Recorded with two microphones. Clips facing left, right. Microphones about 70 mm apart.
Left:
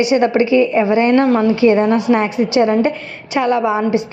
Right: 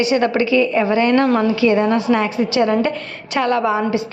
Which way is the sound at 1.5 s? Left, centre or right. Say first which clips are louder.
Left 3 dB; left.